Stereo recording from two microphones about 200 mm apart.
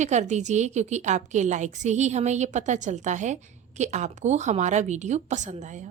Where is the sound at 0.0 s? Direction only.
35° right (ahead or behind).